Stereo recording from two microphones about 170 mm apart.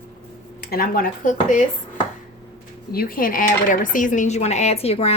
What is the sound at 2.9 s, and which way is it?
Speech, 60° left (ahead or behind).